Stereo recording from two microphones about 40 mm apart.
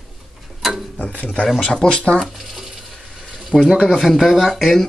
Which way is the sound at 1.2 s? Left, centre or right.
Left.